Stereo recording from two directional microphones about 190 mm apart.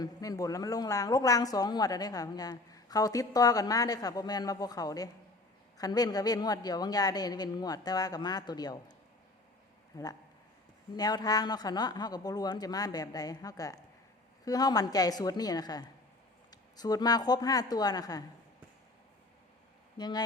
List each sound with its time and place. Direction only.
0.0 s speech: 20° left (ahead or behind)
9.9 s speech: 15° left (ahead or behind)
20.0 s speech: 20° left (ahead or behind)